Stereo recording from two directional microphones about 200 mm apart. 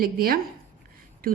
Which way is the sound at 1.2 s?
45° right (ahead or behind).